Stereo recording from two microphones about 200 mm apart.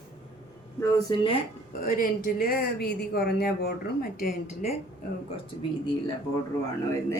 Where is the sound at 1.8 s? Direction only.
45° left (ahead or behind).